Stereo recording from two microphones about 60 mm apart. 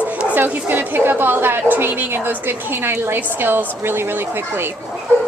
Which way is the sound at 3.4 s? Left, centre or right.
Right.